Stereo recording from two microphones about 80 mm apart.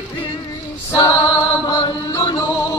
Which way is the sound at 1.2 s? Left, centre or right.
Left.